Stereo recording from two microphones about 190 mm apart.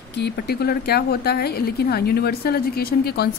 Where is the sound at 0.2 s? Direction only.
55° left (ahead or behind).